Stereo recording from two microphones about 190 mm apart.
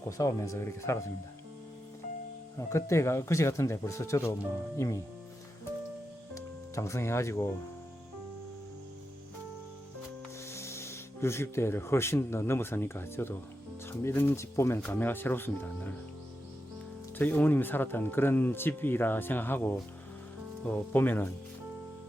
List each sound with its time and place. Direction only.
0.2 s speech: 15° left (ahead or behind)
2.6 s speech: 15° left (ahead or behind)
6.3 s speech: 15° left (ahead or behind)
10.5 s speech: 15° left (ahead or behind)
17.2 s speech: 10° left (ahead or behind)